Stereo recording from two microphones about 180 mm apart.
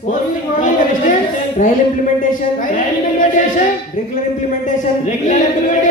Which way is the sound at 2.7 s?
45° left (ahead or behind).